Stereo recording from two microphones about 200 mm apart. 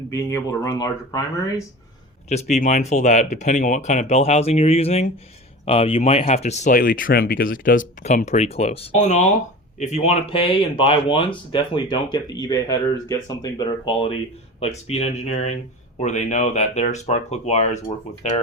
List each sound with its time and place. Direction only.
0.1 s speech: 15° left (ahead or behind)
2.3 s speech: 35° left (ahead or behind)